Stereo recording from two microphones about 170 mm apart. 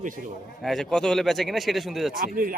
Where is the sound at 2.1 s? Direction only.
55° right (ahead or behind).